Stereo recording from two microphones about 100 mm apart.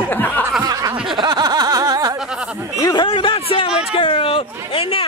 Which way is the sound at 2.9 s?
60° left (ahead or behind).